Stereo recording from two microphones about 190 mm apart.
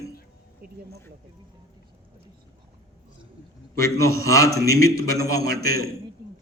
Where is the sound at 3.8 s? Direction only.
15° left (ahead or behind).